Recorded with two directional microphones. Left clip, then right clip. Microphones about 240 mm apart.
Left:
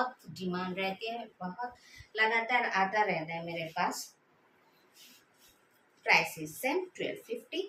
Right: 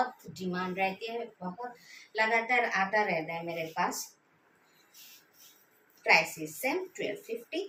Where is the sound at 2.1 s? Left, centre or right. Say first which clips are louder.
Right 1 dB; centre.